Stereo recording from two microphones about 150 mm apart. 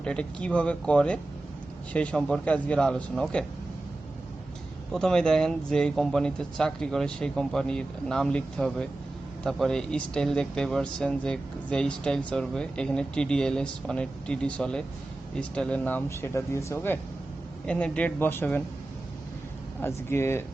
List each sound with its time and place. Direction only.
0.0 s speech: 5° left (ahead or behind)
4.9 s speech: 5° left (ahead or behind)
19.8 s speech: 15° left (ahead or behind)